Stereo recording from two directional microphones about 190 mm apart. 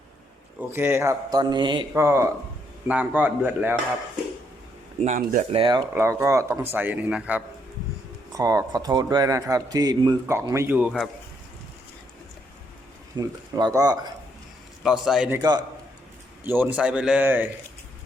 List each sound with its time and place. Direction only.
0.7 s a man's voice: 15° right (ahead or behind)
1.9 s speech: 15° right (ahead or behind)
4.9 s speech: 40° right (ahead or behind)
5.9 s speech: 10° right (ahead or behind)
8.3 s speech: 20° right (ahead or behind)
13.1 s a man's voice: 20° right (ahead or behind)
15.0 s a man's voice: 5° right (ahead or behind)
15.4 s a man's voice: 20° right (ahead or behind)
16.4 s speech: 10° right (ahead or behind)